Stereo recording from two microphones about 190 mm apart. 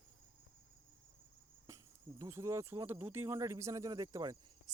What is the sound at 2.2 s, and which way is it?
Speech, 15° right (ahead or behind).